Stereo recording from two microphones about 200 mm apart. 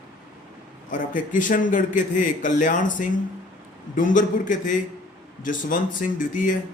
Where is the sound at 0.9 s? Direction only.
40° left (ahead or behind).